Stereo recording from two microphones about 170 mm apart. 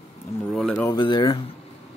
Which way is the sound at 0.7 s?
20° left (ahead or behind).